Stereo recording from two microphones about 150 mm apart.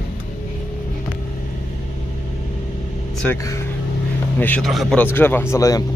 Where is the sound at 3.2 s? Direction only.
10° left (ahead or behind).